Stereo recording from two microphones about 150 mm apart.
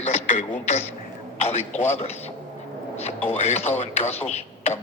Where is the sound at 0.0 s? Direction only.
50° left (ahead or behind).